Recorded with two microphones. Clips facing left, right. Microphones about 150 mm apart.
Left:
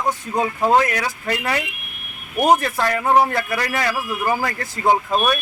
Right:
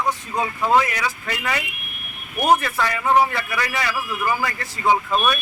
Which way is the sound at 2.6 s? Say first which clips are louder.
Left 2 dB; 45° left (ahead or behind).